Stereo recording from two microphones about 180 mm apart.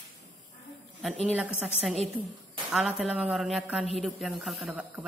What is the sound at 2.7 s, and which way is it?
A man's voice, centre (ahead or behind).